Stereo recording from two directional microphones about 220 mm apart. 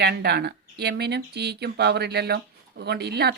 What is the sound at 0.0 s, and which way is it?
Speech, 50° right (ahead or behind).